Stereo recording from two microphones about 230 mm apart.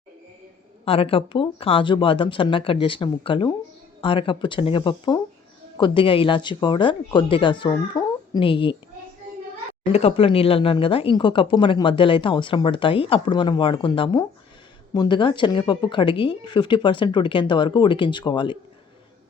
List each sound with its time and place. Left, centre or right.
0.9 s speech: left
9.9 s speech: left